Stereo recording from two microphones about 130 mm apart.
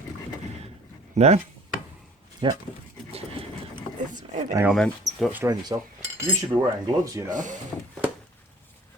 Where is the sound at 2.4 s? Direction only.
35° right (ahead or behind).